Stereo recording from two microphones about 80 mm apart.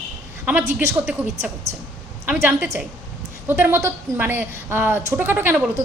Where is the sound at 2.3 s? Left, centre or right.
Right.